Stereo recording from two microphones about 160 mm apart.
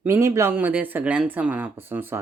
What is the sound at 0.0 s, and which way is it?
Speech, 15° right (ahead or behind).